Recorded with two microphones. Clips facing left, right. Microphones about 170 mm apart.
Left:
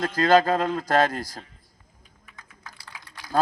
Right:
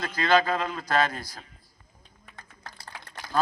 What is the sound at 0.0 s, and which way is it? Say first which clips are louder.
A man's voice: left 4 dB; 45° left (ahead or behind).